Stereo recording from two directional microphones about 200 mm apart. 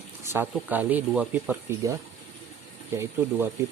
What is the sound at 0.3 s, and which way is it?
Speech, 10° right (ahead or behind).